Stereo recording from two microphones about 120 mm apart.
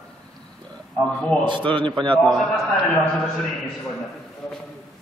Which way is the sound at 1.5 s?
45° right (ahead or behind).